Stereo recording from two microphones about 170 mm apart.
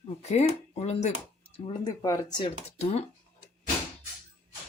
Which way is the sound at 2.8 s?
40° left (ahead or behind).